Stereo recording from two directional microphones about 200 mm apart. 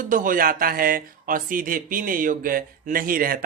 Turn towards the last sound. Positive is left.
turn(degrees=-45)  # may be behind; listen again after turning